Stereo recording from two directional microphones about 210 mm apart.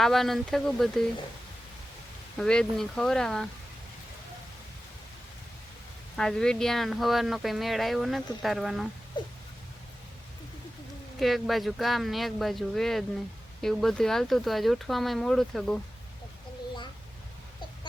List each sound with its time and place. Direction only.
0.0 s speech: centre (ahead or behind)
2.4 s speech: 5° left (ahead or behind)
6.1 s speech: 5° left (ahead or behind)
9.2 s a sound: 20° left (ahead or behind)
11.2 s speech: centre (ahead or behind)